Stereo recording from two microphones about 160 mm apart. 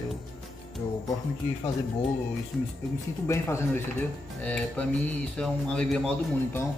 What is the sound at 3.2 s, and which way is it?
Speech, 15° left (ahead or behind).